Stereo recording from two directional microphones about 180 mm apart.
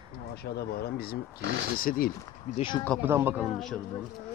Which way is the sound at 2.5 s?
30° left (ahead or behind).